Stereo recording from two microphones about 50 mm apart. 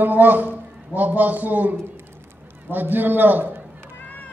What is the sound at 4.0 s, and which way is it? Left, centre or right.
Boat, left.